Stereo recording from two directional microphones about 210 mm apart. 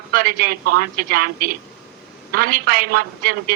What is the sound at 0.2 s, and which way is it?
Speech, 45° right (ahead or behind).